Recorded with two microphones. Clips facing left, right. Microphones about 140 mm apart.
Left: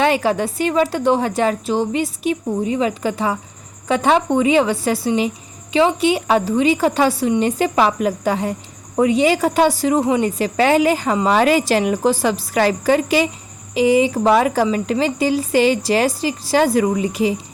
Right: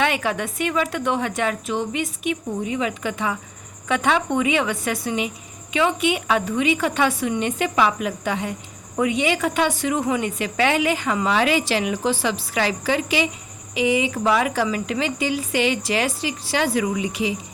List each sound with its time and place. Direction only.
0.0 s speech: 35° left (ahead or behind)